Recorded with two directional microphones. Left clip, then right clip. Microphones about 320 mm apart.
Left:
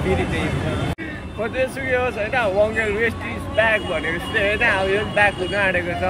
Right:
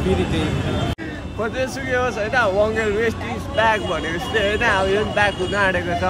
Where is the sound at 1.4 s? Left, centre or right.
Centre.